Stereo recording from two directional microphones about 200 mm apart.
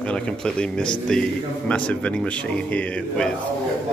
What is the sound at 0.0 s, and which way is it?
A man's voice, 5° left (ahead or behind).